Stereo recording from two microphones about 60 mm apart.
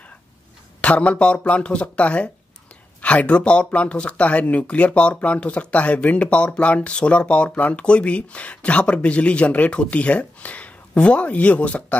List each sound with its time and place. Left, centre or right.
0.7 s speech: left